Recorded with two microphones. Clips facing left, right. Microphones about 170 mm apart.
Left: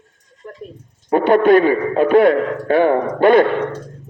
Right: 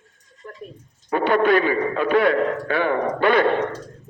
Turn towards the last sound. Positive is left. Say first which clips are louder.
# left 6 dB
turn(degrees=45)  # may be behind; listen again after turning